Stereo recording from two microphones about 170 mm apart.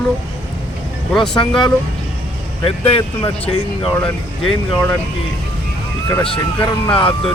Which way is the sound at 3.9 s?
10° left (ahead or behind).